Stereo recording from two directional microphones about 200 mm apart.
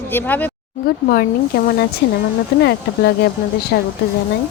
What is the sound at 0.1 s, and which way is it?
Speech, 10° left (ahead or behind).